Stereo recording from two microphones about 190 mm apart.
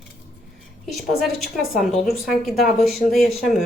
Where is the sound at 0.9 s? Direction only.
Centre (ahead or behind).